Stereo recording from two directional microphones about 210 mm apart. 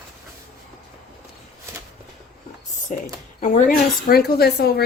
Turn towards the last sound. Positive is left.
turn(degrees=50)  # may be behind; listen again after turning